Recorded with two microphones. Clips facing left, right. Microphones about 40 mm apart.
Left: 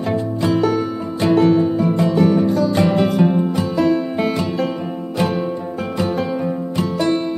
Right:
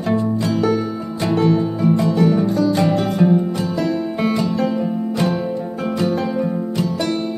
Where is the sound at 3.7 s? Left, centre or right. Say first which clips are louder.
Left 6 dB; centre.